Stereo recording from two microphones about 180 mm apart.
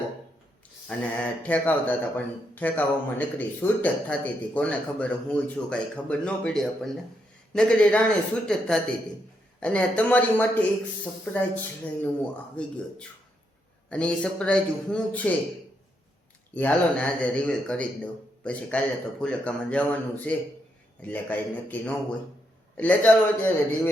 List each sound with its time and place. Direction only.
0.9 s a man's voice: 10° left (ahead or behind)
13.9 s a man's voice: 5° left (ahead or behind)
16.6 s speech: 5° left (ahead or behind)